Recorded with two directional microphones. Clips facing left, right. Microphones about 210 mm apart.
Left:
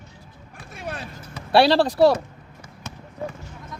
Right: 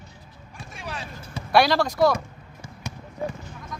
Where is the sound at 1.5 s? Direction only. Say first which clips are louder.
Left 3 dB; 30° left (ahead or behind).